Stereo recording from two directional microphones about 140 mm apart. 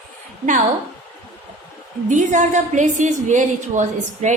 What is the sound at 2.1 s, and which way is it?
A woman's voice, 65° right (ahead or behind).